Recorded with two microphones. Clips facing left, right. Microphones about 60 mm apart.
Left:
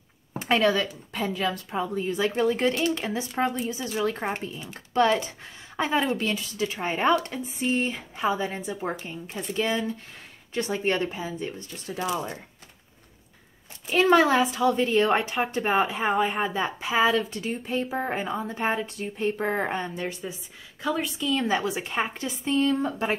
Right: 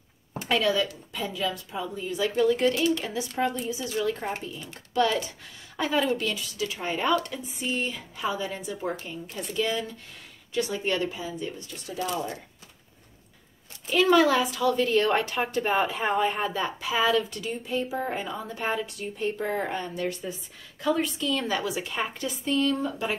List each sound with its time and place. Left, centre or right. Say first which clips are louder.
0.4 s a woman's voice: left 2 dB; left
13.9 s a woman's voice: left 1 dB; left
17.5 s a woman's voice: left 1 dB; left
20.1 s a woman's voice: right 2 dB; centre
21.5 s a woman's voice: left 3 dB; left